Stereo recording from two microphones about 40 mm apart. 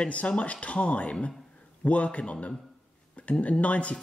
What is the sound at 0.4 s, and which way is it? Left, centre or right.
Speech, left.